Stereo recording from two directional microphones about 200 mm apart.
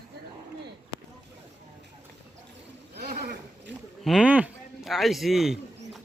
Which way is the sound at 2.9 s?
50° right (ahead or behind).